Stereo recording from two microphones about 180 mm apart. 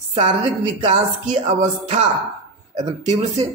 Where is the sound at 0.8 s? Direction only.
40° right (ahead or behind).